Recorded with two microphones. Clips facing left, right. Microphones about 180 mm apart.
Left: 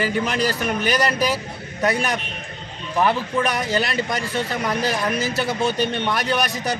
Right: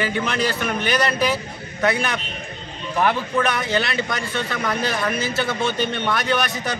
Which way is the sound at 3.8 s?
35° left (ahead or behind).